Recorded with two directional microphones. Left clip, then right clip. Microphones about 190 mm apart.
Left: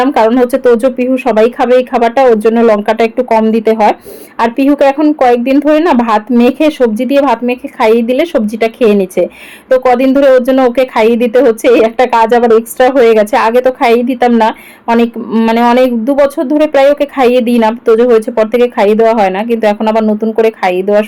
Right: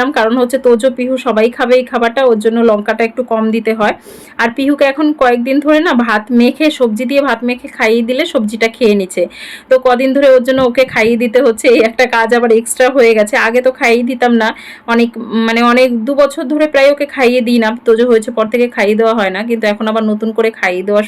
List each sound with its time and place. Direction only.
0.0 s a woman's voice: 15° left (ahead or behind)